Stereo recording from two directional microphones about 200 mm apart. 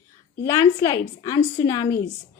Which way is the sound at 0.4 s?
15° left (ahead or behind).